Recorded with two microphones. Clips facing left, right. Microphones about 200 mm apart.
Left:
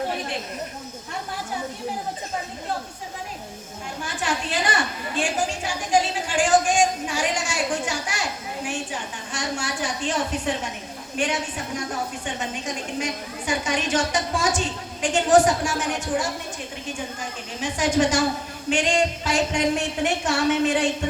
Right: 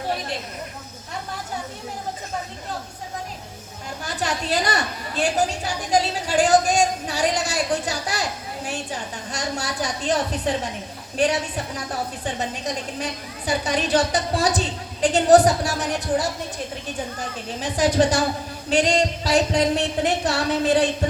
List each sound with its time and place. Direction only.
4.0 s a woman's voice: 40° right (ahead or behind)
17.6 s a woman's voice: 35° right (ahead or behind)